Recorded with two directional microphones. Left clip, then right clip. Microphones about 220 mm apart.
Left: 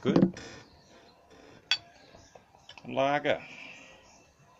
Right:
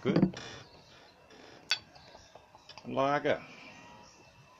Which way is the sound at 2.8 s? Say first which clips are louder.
Left 2 dB; 15° right (ahead or behind).